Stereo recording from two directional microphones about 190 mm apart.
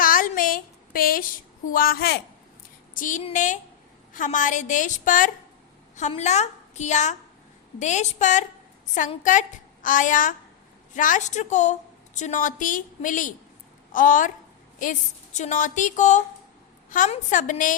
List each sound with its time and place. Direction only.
0.0 s a sound: 45° left (ahead or behind)
1.7 s a woman's voice: 50° left (ahead or behind)
2.9 s a woman's voice: 45° left (ahead or behind)